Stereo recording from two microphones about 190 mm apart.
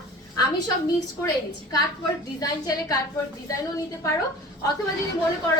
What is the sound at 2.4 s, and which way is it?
Speech, 20° left (ahead or behind).